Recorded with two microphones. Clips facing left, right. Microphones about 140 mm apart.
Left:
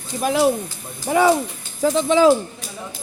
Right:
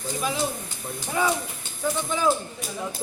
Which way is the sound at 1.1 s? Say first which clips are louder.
Left 9 dB; 80° left.